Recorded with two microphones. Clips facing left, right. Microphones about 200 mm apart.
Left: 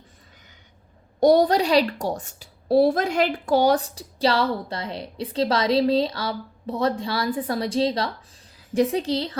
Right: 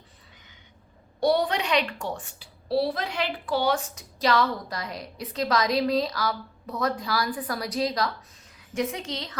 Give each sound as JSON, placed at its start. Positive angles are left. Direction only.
{"t": 1.2, "sound": "a woman's voice", "side_deg": 40}